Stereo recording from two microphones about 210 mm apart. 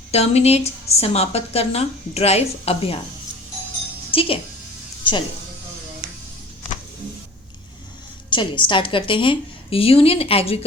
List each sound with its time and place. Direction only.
0.1 s a woman's voice: 30° left (ahead or behind)
4.1 s speech: 25° left (ahead or behind)
8.3 s a woman's voice: 25° left (ahead or behind)